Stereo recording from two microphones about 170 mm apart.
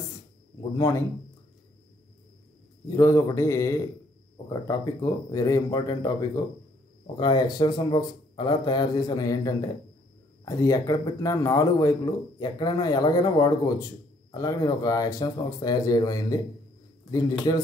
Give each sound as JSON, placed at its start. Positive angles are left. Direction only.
{"t": 0.7, "sound": "a man's voice", "side_deg": 15}
{"t": 3.0, "sound": "a man's voice", "side_deg": 20}
{"t": 7.2, "sound": "speech", "side_deg": 25}